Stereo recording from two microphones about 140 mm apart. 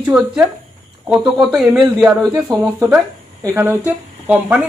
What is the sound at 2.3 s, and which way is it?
Speech, 20° right (ahead or behind).